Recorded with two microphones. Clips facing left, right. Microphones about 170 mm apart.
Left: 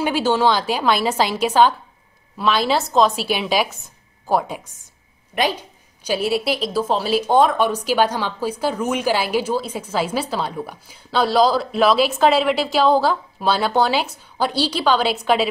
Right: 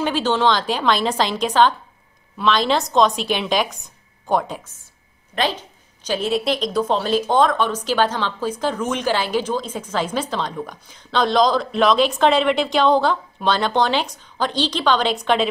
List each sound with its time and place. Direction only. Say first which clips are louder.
0.0 s a woman's voice: left 1 dB; 10° left (ahead or behind)